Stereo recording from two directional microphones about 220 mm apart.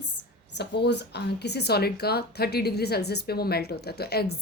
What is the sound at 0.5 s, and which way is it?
Speech, 50° left (ahead or behind).